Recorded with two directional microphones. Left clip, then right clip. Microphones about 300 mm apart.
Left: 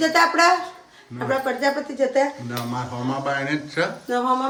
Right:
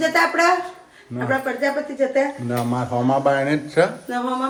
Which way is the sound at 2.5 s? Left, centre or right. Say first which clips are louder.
Right 5 dB; centre.